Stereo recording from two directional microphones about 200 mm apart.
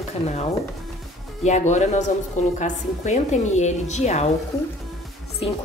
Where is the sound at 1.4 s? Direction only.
35° left (ahead or behind).